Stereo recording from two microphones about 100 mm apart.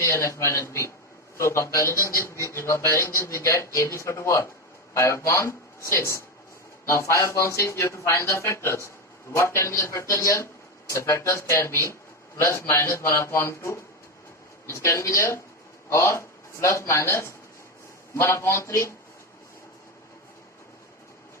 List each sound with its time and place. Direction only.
0.0 s a man's voice: 30° left (ahead or behind)